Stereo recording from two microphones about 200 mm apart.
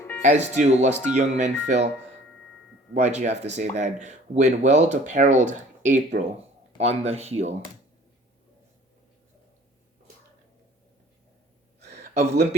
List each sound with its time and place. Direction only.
0.2 s speech: 35° right (ahead or behind)
2.9 s speech: 35° right (ahead or behind)
12.1 s speech: 30° right (ahead or behind)